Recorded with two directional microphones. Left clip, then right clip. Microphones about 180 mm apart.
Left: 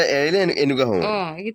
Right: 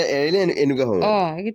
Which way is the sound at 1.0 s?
65° right (ahead or behind).